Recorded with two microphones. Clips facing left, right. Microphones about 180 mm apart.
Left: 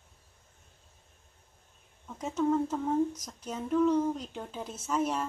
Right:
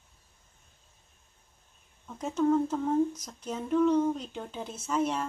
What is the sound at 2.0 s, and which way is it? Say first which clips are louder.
Speech: right 2 dB; centre (ahead or behind).